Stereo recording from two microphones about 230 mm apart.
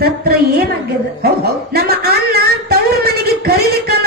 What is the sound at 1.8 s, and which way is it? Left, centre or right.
Speech, right.